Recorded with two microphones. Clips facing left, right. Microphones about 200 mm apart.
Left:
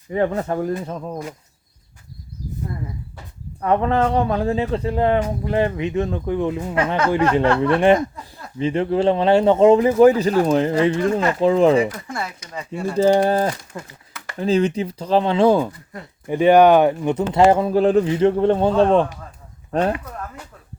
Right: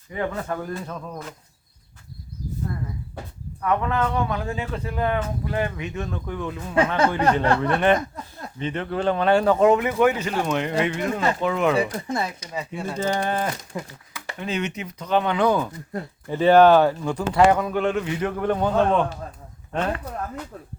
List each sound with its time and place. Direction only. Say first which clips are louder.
0.1 s speech: left 7 dB; 35° left (ahead or behind)
3.6 s speech: left 5 dB; 30° left (ahead or behind)
11.9 s speech: right 3 dB; 20° right (ahead or behind)
12.5 s speech: left 4 dB; centre (ahead or behind)
13.0 s speech: left 9 dB; 35° left (ahead or behind)
13.7 s speech: right 2 dB; 5° right (ahead or behind)
14.3 s speech: left 10 dB; 35° left (ahead or behind)
16.2 s speech: left 2 dB; 15° left (ahead or behind); by 19.0 s 30° left (ahead or behind)